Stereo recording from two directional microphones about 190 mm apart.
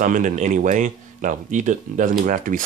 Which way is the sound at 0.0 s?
45° right (ahead or behind).